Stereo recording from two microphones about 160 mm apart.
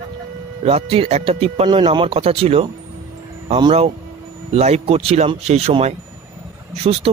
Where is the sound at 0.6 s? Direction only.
40° right (ahead or behind).